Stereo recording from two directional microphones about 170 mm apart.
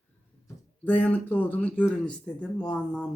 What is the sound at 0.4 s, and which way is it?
Speech, 10° left (ahead or behind).